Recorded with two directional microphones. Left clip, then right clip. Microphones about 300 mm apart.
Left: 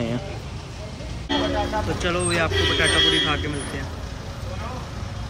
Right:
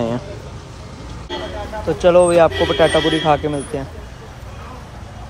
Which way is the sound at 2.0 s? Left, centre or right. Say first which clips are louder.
Right 15 dB; centre.